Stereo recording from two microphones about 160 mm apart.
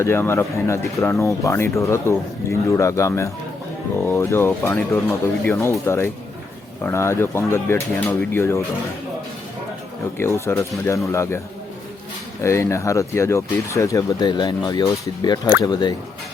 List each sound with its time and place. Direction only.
0.0 s speech: 15° left (ahead or behind)
10.2 s speech: 15° left (ahead or behind)
12.4 s speech: 15° left (ahead or behind)